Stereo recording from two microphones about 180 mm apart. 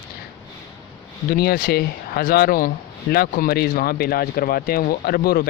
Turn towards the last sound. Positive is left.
turn(degrees=60)  # may be behind; listen again after turning